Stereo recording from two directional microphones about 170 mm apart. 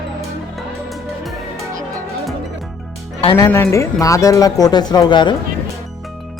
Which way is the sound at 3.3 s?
20° left (ahead or behind).